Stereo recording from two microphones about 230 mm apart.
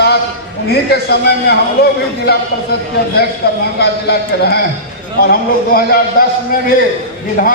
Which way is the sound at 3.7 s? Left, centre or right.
Left.